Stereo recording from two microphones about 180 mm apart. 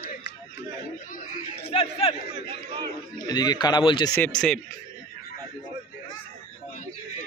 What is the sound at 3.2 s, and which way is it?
Speech, 25° left (ahead or behind).